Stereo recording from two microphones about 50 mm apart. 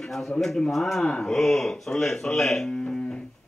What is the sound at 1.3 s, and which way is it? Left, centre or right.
Speech, centre.